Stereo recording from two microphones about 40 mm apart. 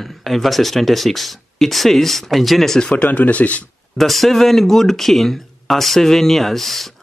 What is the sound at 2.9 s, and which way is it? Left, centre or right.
Speech, left.